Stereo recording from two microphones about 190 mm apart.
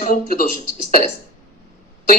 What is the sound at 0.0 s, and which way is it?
Speech, 50° left (ahead or behind).